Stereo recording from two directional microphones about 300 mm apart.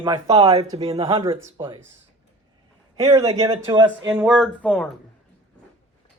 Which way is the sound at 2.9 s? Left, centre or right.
Centre.